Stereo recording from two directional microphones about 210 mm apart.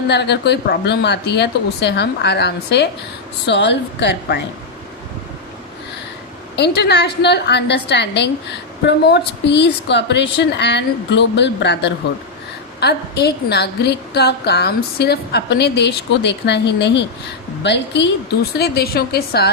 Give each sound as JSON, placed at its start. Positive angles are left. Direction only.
{"t": 0.1, "sound": "a woman's voice", "side_deg": 55}
{"t": 6.6, "sound": "a woman's voice", "side_deg": 50}